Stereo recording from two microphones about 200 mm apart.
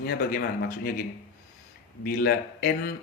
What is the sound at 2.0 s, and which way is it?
Speech, 50° left (ahead or behind).